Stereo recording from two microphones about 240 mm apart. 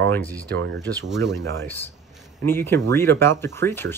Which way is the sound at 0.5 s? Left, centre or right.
Right.